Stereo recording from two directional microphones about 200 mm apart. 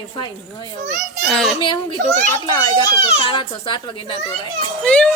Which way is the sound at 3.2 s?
25° left (ahead or behind).